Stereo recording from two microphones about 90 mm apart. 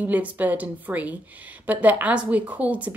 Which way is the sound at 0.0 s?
20° right (ahead or behind).